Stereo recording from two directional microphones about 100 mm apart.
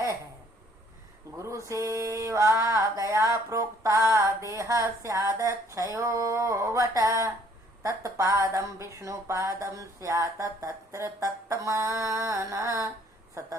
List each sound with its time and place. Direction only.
1.4 s mantra: 30° right (ahead or behind)
3.5 s a sound: 30° right (ahead or behind)
5.7 s speech: 35° right (ahead or behind)